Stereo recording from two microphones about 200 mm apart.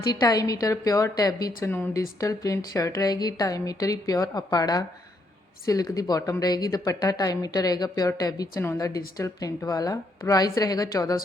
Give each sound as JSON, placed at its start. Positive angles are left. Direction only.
{"t": 0.0, "sound": "speech", "side_deg": 20}